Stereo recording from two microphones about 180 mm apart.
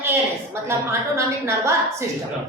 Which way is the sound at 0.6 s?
15° right (ahead or behind).